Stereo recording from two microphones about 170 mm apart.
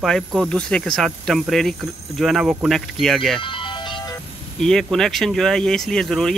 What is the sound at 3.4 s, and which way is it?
Music, 30° left (ahead or behind).